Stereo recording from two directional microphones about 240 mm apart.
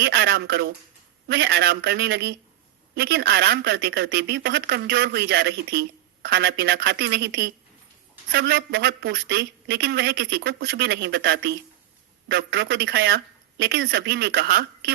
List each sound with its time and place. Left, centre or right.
0.0 s a woman's voice: right